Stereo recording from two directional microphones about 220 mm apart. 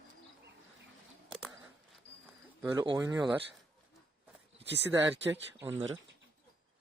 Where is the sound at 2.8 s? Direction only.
20° right (ahead or behind).